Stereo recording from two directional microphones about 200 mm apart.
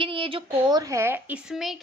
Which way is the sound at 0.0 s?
25° right (ahead or behind).